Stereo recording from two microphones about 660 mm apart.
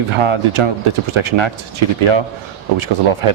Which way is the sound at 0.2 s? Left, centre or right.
Right.